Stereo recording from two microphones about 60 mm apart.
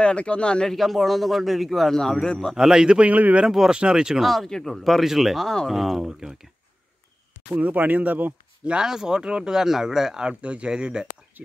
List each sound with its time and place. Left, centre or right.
0.0 s speech: centre
0.7 s a man's voice: centre
2.5 s speech: centre
3.4 s speech: centre
4.2 s a man's voice: centre
7.6 s speech: right
8.6 s speech: centre